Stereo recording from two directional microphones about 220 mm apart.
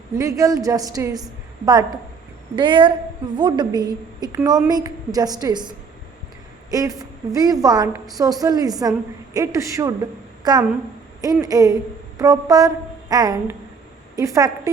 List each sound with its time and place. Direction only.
0.2 s a woman's voice: 15° right (ahead or behind)